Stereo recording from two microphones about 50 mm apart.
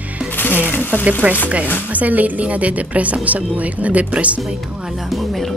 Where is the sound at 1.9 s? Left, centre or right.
Right.